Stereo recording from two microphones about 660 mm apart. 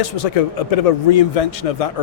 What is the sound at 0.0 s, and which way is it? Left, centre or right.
Speech, left.